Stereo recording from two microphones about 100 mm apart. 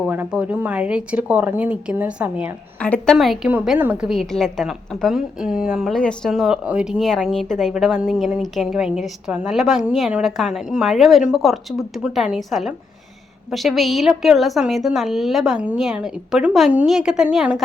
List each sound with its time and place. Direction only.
0.3 s a woman's voice: 15° right (ahead or behind)
2.7 s a woman's voice: 10° left (ahead or behind)
3.2 s a woman's voice: centre (ahead or behind)
3.8 s a woman's voice: 20° right (ahead or behind)
4.0 s a woman's voice: centre (ahead or behind)
6.0 s a woman's voice: 10° left (ahead or behind)
6.3 s a woman's voice: 5° right (ahead or behind)